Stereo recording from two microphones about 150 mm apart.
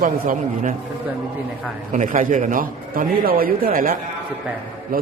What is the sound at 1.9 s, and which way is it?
A man's voice, 60° right (ahead or behind).